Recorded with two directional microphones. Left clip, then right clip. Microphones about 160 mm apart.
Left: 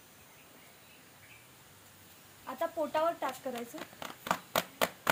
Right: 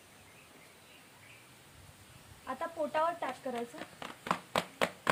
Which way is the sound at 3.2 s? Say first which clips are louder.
Even; 10° right (ahead or behind).